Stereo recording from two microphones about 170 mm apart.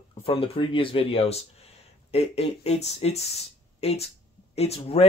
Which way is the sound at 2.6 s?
40° left (ahead or behind).